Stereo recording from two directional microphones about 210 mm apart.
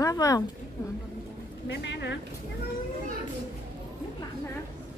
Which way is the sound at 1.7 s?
55° left (ahead or behind).